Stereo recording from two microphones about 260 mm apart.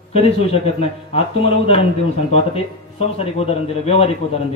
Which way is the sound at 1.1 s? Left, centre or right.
Left.